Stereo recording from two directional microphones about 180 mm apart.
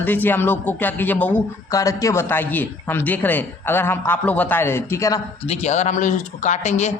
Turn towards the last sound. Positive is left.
turn(degrees=40)  # may be behind; listen again after turning